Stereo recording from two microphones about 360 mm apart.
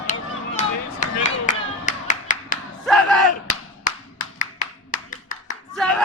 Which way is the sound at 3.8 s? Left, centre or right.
Left.